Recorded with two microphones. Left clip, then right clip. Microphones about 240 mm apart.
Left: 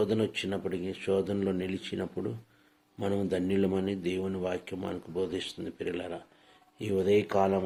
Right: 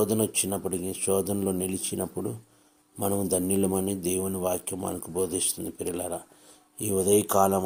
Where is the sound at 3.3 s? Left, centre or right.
Right.